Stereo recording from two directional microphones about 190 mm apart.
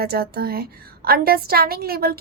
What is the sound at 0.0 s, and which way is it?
A woman's voice, 55° right (ahead or behind).